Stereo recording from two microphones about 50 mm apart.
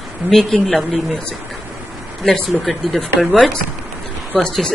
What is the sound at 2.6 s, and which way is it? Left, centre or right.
Speech, centre.